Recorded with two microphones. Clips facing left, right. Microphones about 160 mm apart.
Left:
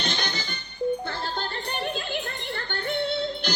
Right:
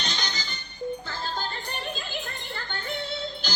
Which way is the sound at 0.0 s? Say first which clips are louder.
Left 4 dB; 55° left (ahead or behind).